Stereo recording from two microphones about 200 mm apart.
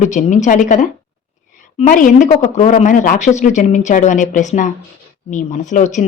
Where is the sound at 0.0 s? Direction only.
35° left (ahead or behind).